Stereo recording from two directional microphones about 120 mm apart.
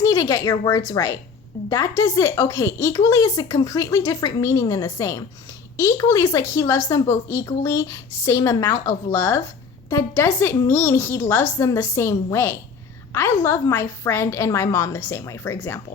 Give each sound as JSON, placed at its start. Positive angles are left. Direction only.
{"t": 0.1, "sound": "speech", "side_deg": 30}